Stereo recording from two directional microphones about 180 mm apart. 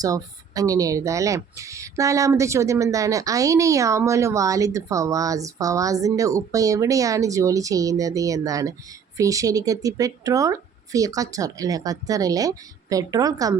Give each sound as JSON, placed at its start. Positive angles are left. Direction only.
{"t": 0.0, "sound": "speech", "side_deg": -20}